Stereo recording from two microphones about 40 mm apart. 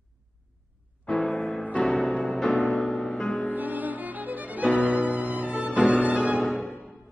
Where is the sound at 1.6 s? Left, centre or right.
Left.